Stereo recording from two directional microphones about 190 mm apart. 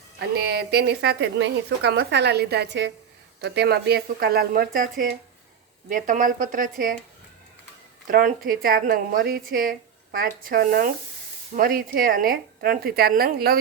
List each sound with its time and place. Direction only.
0.2 s a woman's voice: 60° right (ahead or behind)
8.0 s speech: 45° right (ahead or behind)